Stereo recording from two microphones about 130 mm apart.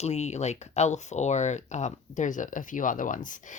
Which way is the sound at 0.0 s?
60° left (ahead or behind).